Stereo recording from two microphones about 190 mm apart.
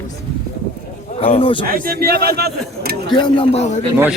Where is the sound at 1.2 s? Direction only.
30° left (ahead or behind).